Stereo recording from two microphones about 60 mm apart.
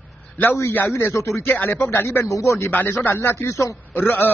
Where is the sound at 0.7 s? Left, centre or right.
Left.